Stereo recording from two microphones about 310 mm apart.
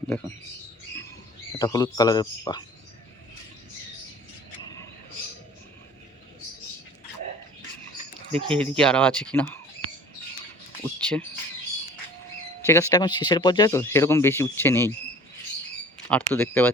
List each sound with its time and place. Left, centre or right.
1.5 s speech: centre
4.6 s a sound: centre
8.3 s speech: centre
8.5 s speech: centre
10.8 s a sound: centre
12.6 s speech: centre
16.0 s speech: centre